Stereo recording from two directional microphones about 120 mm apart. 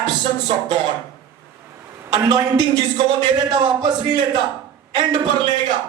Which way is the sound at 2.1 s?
40° right (ahead or behind).